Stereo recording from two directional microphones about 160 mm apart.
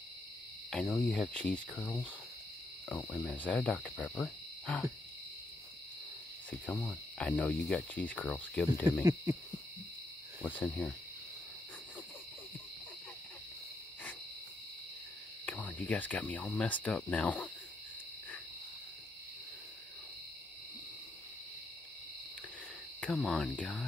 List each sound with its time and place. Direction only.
0.7 s cricket: 5° left (ahead or behind)
2.9 s speech: 10° left (ahead or behind)
6.6 s speech: 5° left (ahead or behind)
9.0 s hoot: 20° right (ahead or behind)
10.4 s speech: 10° left (ahead or behind)
15.4 s speech: 10° left (ahead or behind)
22.9 s cricket: 5° left (ahead or behind)